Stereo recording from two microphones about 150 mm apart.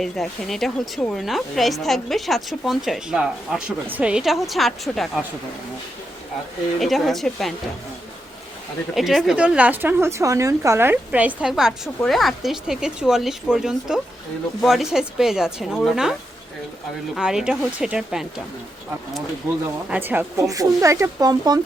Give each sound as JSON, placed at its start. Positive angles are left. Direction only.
{"t": 0.0, "sound": "speech", "side_deg": 0}
{"t": 6.7, "sound": "speech", "side_deg": 0}
{"t": 9.0, "sound": "a woman's voice", "side_deg": 0}
{"t": 17.2, "sound": "speech", "side_deg": -5}
{"t": 19.9, "sound": "a woman's voice", "side_deg": -10}